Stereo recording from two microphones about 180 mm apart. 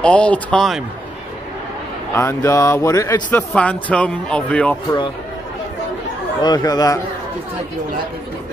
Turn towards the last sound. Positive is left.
turn(degrees=20)  # may be behind; listen again after turning